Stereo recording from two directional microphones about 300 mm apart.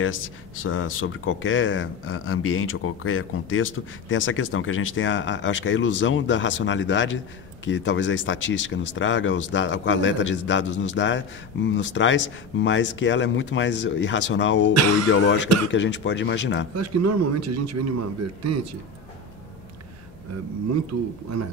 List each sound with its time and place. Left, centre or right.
0.7 s speech: left
16.7 s a man's voice: right